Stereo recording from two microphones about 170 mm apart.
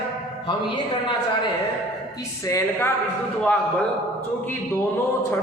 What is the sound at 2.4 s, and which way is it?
Speech, 15° left (ahead or behind).